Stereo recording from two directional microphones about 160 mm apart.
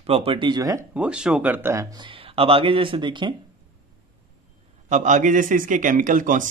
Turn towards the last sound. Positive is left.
turn(degrees=-55)  # may be behind; listen again after turning